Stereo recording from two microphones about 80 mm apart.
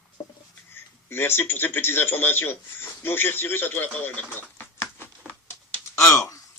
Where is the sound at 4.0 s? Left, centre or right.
Left.